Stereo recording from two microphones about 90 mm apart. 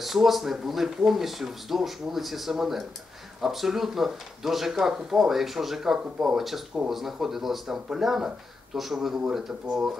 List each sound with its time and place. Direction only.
0.0 s speech: centre (ahead or behind)